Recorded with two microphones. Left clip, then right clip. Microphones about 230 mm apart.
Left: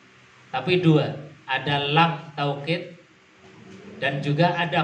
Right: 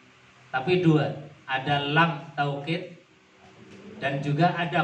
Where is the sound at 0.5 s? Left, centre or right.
Left.